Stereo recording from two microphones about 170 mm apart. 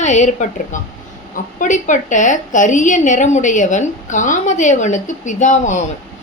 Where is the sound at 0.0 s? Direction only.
45° left (ahead or behind).